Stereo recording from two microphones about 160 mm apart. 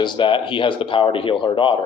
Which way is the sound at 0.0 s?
30° left (ahead or behind).